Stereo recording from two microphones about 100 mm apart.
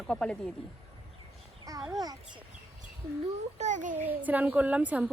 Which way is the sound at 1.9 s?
40° right (ahead or behind).